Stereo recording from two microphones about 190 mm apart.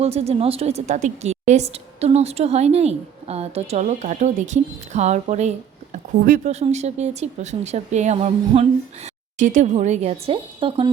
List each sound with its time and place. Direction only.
0.0 s a woman's voice: 35° right (ahead or behind)